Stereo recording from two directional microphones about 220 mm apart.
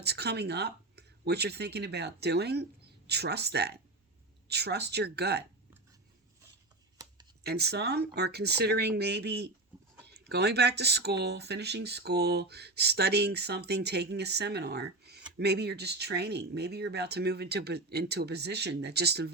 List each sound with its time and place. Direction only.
0.0 s speech: 50° right (ahead or behind)
7.4 s speech: 50° right (ahead or behind)